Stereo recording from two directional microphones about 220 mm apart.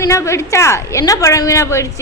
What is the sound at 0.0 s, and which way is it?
A woman's voice, 15° left (ahead or behind).